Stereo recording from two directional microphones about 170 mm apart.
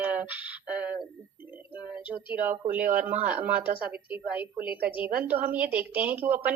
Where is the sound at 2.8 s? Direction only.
55° right (ahead or behind).